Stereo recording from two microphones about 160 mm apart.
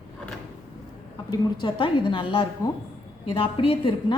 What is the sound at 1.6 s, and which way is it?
A woman's voice, 30° left (ahead or behind).